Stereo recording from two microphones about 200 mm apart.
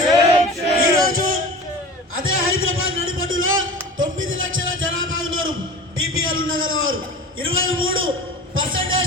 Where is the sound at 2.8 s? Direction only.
85° right.